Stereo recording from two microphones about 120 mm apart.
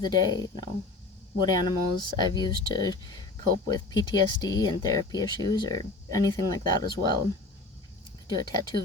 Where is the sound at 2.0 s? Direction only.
35° left (ahead or behind).